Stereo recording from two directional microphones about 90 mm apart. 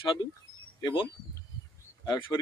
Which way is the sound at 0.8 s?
60° left (ahead or behind).